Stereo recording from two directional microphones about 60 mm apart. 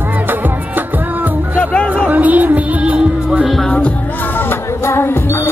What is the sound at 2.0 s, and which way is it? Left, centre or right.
Music, right.